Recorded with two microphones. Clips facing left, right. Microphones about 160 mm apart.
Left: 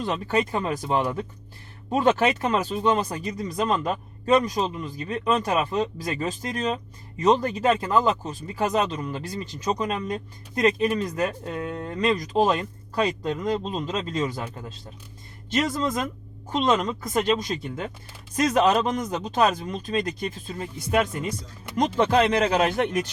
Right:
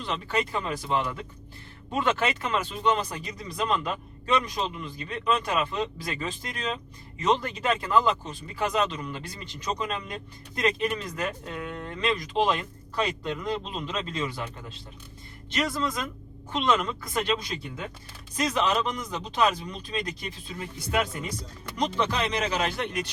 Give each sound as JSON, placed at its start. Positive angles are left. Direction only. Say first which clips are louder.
{"t": 0.0, "sound": "speech", "louder": "left 5 dB", "side_deg": 45}
{"t": 15.6, "sound": "speech", "louder": "left 1 dB", "side_deg": 45}